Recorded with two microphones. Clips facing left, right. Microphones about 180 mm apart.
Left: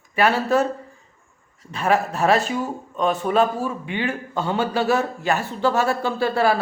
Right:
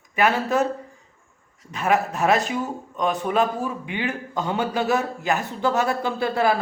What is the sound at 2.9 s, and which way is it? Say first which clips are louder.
A man's voice: left 3 dB; 15° right (ahead or behind).